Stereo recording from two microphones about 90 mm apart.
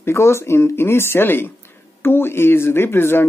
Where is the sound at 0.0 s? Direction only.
30° left (ahead or behind).